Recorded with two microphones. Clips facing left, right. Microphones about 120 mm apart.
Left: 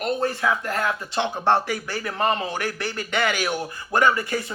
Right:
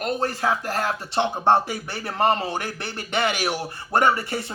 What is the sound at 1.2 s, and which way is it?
Speech, 20° right (ahead or behind).